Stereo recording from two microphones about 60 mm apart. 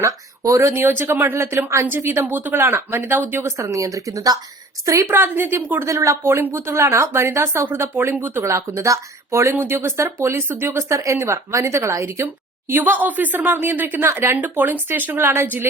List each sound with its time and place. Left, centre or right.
0.0 s speech: right
0.6 s speech: right
1.9 s speech: right
3.4 s speech: right
5.0 s speech: right
5.8 s a woman's voice: right
7.9 s speech: right
8.4 s a woman's voice: right
9.5 s speech: right
15.2 s a woman's voice: right